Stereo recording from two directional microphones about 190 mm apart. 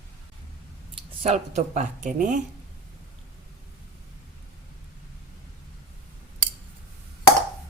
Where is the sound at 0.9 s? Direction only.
30° right (ahead or behind).